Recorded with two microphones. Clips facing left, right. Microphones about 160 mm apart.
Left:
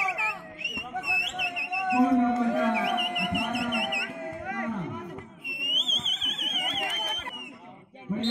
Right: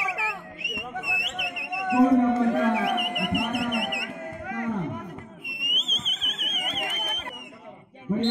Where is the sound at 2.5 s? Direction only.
60° right (ahead or behind).